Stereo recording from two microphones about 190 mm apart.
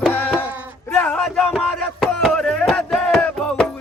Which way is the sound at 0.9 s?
5° left (ahead or behind).